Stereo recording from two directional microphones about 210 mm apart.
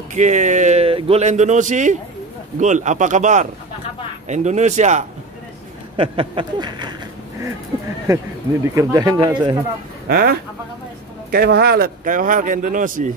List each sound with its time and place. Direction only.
0.1 s speech: 35° right (ahead or behind)
8.6 s speech: 15° right (ahead or behind)
10.0 s speech: 45° right (ahead or behind)
11.3 s speech: 50° right (ahead or behind)